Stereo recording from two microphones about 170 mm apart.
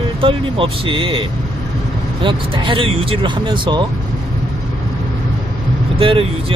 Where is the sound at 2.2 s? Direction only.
30° right (ahead or behind).